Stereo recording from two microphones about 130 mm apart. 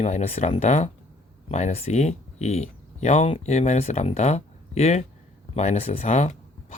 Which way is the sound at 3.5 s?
60° left (ahead or behind).